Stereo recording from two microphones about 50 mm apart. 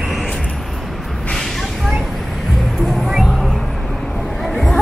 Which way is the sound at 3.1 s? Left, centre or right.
Centre.